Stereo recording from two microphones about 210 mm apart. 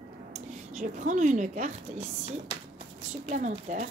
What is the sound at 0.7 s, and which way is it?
A woman's voice, 35° right (ahead or behind).